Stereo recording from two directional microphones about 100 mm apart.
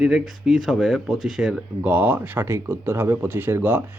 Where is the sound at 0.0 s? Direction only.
5° right (ahead or behind).